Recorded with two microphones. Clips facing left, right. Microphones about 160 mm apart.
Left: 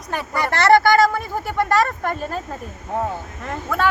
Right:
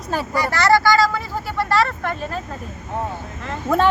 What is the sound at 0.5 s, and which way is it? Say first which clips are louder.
Speech: left 2 dB; 55° left (ahead or behind).